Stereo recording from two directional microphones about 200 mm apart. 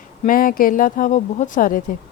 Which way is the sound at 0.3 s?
45° left (ahead or behind).